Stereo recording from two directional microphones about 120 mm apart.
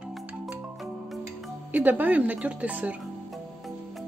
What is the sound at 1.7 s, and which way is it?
Speech, 15° right (ahead or behind).